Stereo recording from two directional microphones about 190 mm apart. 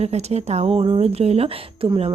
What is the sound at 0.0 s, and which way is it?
Speech, 35° right (ahead or behind).